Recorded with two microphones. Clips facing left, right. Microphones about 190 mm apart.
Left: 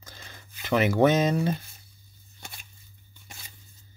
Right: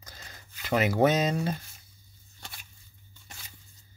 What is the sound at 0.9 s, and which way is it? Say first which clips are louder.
Speech: left 3 dB; 50° left (ahead or behind).